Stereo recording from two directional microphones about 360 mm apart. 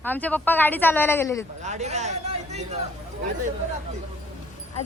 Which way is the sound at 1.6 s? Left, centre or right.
Centre.